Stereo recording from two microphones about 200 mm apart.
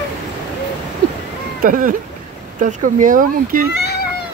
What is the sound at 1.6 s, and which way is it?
Speech, 45° right (ahead or behind).